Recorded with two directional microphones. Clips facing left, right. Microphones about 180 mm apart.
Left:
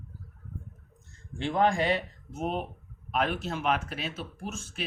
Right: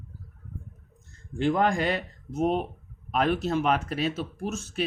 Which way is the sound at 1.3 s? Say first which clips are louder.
Right 2 dB; 45° right (ahead or behind).